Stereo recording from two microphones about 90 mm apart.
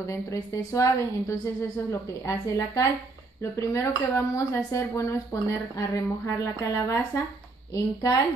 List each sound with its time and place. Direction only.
0.0 s speech: 35° left (ahead or behind)